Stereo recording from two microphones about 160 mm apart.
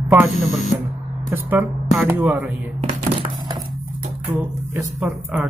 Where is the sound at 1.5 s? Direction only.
5° right (ahead or behind).